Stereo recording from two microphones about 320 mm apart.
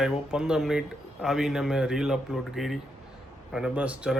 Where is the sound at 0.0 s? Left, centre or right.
Centre.